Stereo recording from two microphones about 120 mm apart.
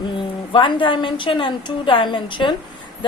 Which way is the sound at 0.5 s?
45° left (ahead or behind).